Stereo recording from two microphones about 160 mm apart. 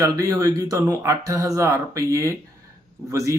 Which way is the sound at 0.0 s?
20° right (ahead or behind).